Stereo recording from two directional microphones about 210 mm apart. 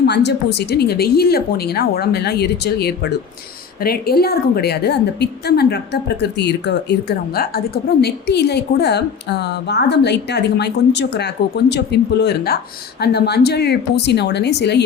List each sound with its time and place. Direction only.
0.0 s a woman's voice: 55° left (ahead or behind)